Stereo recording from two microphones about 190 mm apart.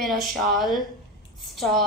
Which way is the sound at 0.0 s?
Centre (ahead or behind).